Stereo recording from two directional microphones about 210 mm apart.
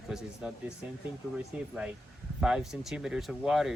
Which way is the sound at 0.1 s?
5° right (ahead or behind).